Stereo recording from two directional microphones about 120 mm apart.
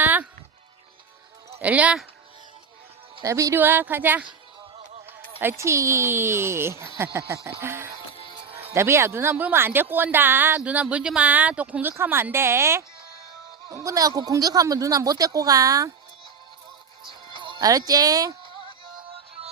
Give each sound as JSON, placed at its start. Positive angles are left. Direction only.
{"t": 0.0, "sound": "music", "side_deg": -15}
{"t": 1.5, "sound": "speech", "side_deg": -15}
{"t": 3.2, "sound": "speech", "side_deg": -25}
{"t": 5.4, "sound": "speech", "side_deg": -20}
{"t": 8.2, "sound": "music", "side_deg": -50}
{"t": 8.7, "sound": "speech", "side_deg": -20}
{"t": 17.1, "sound": "music", "side_deg": -45}
{"t": 17.6, "sound": "speech", "side_deg": -30}